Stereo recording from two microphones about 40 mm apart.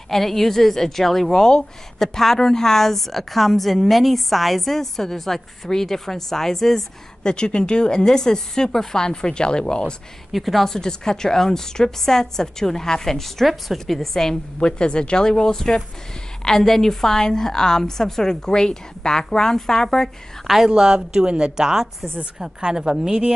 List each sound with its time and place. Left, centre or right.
0.1 s a woman's voice: centre
7.2 s a woman's voice: left
10.3 s a woman's voice: centre
20.4 s a woman's voice: centre